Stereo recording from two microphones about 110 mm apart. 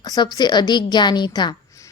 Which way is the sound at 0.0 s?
35° left (ahead or behind).